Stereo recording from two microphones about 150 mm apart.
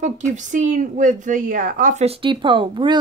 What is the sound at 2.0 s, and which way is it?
Speech, 40° right (ahead or behind).